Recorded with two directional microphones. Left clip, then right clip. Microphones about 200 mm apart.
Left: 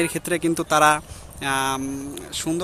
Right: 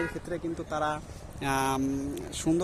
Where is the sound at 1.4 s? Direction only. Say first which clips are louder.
Left 5 dB; 5° right (ahead or behind).